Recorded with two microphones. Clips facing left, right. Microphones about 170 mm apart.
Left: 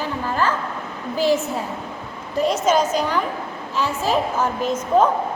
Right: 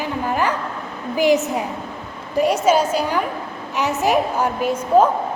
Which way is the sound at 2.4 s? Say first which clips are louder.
Right 2 dB; 10° right (ahead or behind).